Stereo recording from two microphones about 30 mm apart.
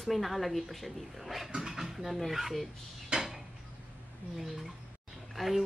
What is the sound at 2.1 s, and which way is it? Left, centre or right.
Speech, centre.